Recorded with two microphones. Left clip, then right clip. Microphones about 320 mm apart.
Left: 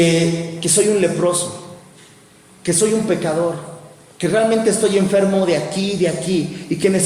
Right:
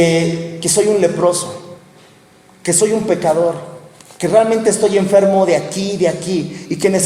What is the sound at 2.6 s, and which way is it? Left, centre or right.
Speech, right.